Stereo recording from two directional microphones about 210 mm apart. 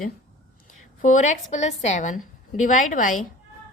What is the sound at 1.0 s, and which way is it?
A woman's voice, 35° left (ahead or behind).